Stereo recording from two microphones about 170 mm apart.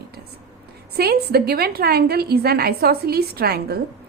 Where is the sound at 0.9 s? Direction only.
70° right (ahead or behind).